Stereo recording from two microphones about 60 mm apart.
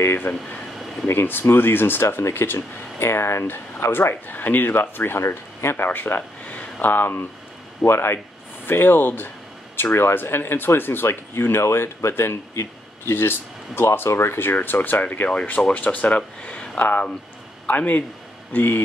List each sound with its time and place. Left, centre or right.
0.0 s speech: left
5.2 s speech: left
5.9 s speech: left